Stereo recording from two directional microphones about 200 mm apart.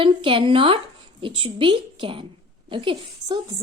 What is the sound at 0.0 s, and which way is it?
A woman's voice, 25° right (ahead or behind).